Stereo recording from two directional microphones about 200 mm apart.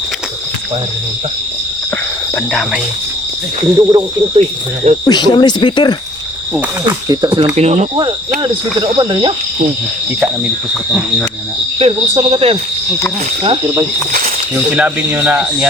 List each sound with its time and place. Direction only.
2.5 s cricket: centre (ahead or behind)
3.8 s speech: 20° right (ahead or behind)
5.0 s speech: 20° left (ahead or behind)
6.5 s speech: 10° right (ahead or behind)
7.1 s speech: 20° right (ahead or behind)
7.5 s speech: 35° right (ahead or behind)
8.4 s speech: 20° right (ahead or behind)
11.8 s speech: 25° right (ahead or behind)
14.8 s speech: 5° right (ahead or behind)